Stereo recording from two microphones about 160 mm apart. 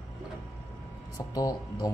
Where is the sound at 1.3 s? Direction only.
20° left (ahead or behind).